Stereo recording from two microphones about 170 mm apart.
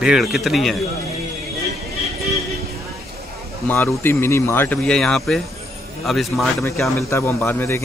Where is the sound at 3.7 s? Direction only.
15° left (ahead or behind).